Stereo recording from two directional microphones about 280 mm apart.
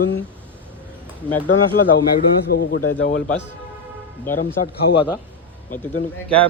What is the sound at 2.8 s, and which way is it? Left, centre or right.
Speech, left.